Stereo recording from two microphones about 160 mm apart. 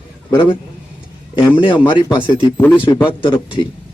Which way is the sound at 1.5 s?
30° left (ahead or behind).